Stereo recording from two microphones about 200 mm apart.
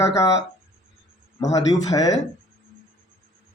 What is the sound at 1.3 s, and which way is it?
Speech, 20° left (ahead or behind).